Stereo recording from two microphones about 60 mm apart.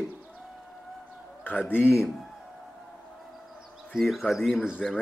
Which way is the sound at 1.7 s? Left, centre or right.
Left.